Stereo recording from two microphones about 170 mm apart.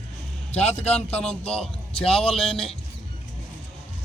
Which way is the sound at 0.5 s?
40° left (ahead or behind).